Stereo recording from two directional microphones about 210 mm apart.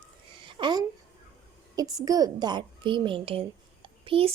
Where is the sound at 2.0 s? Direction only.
15° right (ahead or behind).